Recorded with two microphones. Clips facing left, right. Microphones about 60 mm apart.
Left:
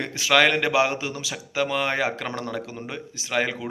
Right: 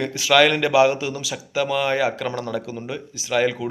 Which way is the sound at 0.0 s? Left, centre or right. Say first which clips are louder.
Right 3 dB; left.